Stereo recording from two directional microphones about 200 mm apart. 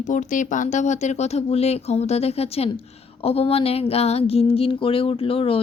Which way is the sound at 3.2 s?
30° left (ahead or behind).